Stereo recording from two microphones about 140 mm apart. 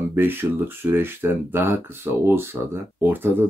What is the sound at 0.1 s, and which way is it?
Speech, 15° right (ahead or behind).